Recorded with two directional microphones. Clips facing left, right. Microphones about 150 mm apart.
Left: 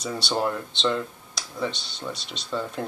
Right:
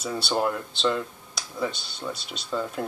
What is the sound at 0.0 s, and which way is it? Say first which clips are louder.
Speech: right 1 dB; 5° right (ahead or behind).